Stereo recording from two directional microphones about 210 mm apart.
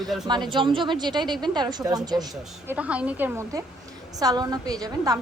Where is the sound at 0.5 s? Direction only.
25° right (ahead or behind).